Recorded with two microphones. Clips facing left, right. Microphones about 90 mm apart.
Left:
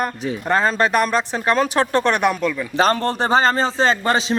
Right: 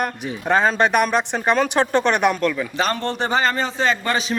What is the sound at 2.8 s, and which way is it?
Speech, 40° left (ahead or behind).